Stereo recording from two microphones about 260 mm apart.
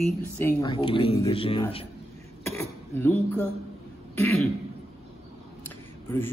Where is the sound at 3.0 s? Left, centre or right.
Centre.